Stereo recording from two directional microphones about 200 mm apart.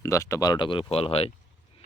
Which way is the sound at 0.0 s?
15° left (ahead or behind).